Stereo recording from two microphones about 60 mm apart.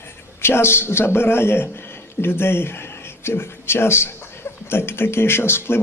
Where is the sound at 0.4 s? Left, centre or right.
Left.